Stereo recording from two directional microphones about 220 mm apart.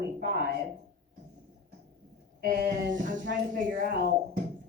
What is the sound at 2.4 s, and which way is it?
Speech, 45° right (ahead or behind).